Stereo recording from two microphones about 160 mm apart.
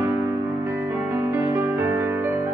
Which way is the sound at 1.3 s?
15° right (ahead or behind).